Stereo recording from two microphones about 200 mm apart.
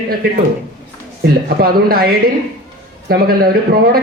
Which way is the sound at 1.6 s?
50° right (ahead or behind).